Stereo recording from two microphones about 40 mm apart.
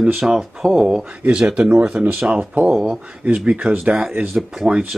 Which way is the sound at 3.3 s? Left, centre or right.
Right.